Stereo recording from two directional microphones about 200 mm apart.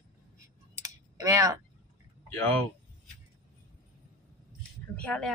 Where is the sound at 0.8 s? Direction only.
15° right (ahead or behind).